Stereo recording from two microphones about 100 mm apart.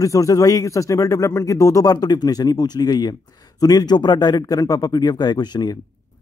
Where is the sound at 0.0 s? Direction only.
35° left (ahead or behind).